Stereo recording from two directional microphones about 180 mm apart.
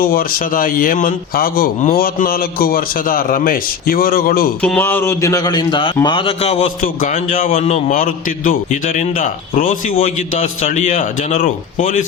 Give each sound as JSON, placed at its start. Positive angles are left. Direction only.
{"t": 0.0, "sound": "a man's voice", "side_deg": 55}
{"t": 4.6, "sound": "a man's voice", "side_deg": 10}
{"t": 6.8, "sound": "a man's voice", "side_deg": 50}